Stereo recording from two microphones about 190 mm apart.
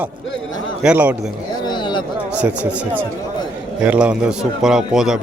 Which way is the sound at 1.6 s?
25° left (ahead or behind).